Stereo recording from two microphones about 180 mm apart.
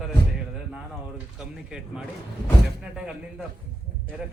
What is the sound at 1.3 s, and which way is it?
A man's voice, 5° right (ahead or behind).